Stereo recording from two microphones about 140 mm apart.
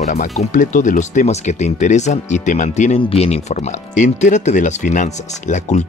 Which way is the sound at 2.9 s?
45° left (ahead or behind).